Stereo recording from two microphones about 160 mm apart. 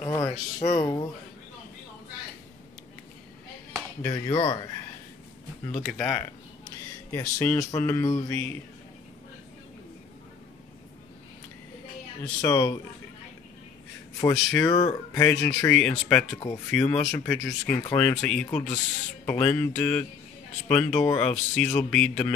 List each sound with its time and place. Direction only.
0.0 s a sound: 15° left (ahead or behind)
0.7 s speech: 25° left (ahead or behind)
4.0 s speech: 25° left (ahead or behind)
5.7 s speech: 5° left (ahead or behind)
7.1 s speech: 15° left (ahead or behind)
12.2 s speech: 20° left (ahead or behind)
14.2 s speech: 20° left (ahead or behind)
15.1 s speech: 10° left (ahead or behind)